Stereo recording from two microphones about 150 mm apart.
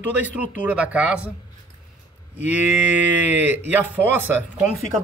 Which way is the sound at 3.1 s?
10° right (ahead or behind).